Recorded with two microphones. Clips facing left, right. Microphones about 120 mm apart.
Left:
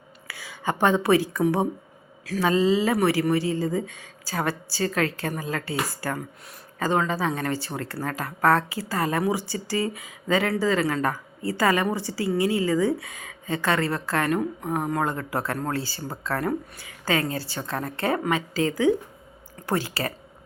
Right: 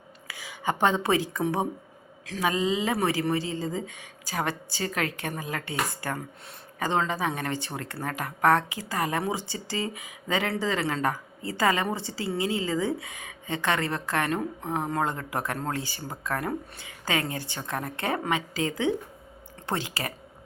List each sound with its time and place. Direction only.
0.3 s a woman's voice: 20° right (ahead or behind)